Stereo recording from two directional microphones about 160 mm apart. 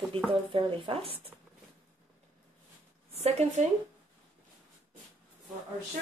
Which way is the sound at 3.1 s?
45° right (ahead or behind).